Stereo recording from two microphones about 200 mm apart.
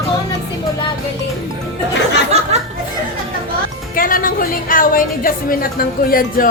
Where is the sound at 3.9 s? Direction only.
45° left (ahead or behind).